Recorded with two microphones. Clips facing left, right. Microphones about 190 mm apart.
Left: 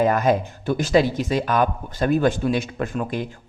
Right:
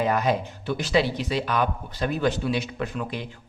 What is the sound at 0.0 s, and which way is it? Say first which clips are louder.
Speech: left 5 dB; 45° left (ahead or behind).